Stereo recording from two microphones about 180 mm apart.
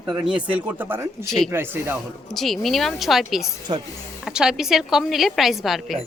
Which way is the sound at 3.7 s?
30° right (ahead or behind).